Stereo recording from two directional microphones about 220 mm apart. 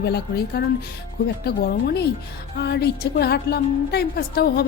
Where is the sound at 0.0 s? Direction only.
50° left (ahead or behind).